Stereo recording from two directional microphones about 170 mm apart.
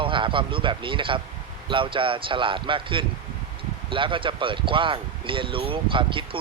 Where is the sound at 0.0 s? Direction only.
30° right (ahead or behind).